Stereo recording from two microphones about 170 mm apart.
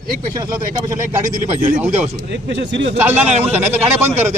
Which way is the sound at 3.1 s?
40° right (ahead or behind).